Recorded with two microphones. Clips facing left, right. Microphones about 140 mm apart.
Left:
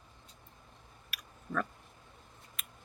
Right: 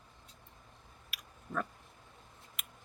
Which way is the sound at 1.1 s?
20° right (ahead or behind).